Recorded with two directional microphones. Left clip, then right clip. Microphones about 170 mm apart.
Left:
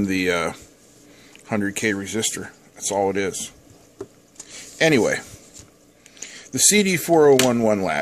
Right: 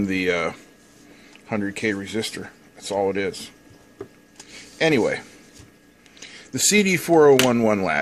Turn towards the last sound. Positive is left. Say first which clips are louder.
# even
turn(degrees=5)  # may be behind; listen again after turning